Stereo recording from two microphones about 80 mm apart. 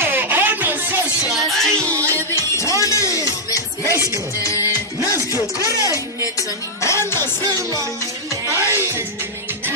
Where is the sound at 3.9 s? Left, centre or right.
Right.